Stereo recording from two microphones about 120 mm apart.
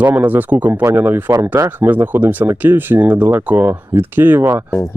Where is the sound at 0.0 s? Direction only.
15° right (ahead or behind).